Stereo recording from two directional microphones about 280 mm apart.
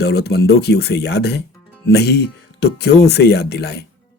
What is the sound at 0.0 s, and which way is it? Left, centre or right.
Speech, left.